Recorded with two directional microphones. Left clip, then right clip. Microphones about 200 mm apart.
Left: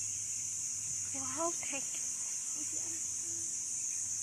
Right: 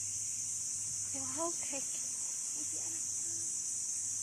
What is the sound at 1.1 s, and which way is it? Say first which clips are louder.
Speech: left 2 dB; 5° left (ahead or behind).